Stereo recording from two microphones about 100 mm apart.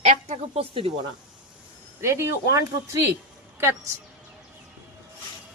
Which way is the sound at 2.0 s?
25° right (ahead or behind).